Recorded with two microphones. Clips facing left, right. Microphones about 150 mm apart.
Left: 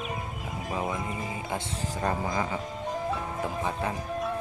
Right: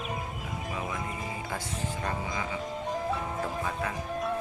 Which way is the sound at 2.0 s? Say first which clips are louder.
Left 8 dB; 40° left (ahead or behind).